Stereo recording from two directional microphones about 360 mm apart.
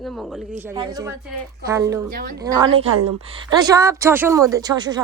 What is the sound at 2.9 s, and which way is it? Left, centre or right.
Speech, right.